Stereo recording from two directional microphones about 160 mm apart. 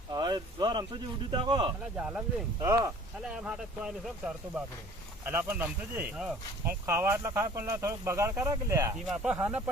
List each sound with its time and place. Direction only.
0.1 s a sound: 25° right (ahead or behind)
1.3 s speech: 30° right (ahead or behind)
2.0 s speech: 5° right (ahead or behind)
2.6 s speech: 20° right (ahead or behind)
3.2 s speech: 5° right (ahead or behind)
9.0 s speech: 5° right (ahead or behind)